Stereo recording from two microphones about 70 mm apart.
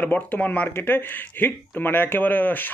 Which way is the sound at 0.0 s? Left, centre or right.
Left.